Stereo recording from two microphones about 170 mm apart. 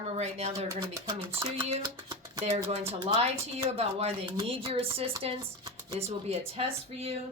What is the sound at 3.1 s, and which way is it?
Speech, 35° right (ahead or behind).